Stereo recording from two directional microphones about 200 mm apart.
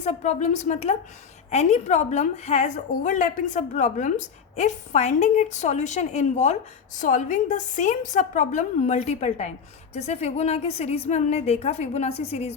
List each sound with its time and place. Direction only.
0.0 s a woman's voice: 35° left (ahead or behind)